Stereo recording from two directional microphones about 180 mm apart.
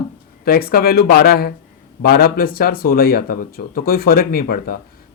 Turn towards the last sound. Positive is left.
turn(degrees=55)  # may be behind; listen again after turning